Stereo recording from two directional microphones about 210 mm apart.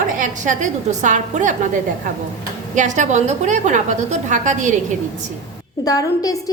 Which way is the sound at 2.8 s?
35° right (ahead or behind).